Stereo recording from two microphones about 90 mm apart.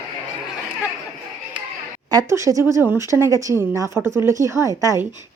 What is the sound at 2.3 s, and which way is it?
A woman's voice, 35° right (ahead or behind).